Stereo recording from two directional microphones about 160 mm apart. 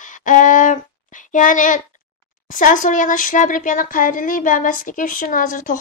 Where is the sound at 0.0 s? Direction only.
55° left (ahead or behind).